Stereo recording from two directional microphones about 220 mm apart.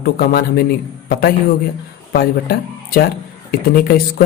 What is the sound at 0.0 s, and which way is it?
Speech, 45° left (ahead or behind).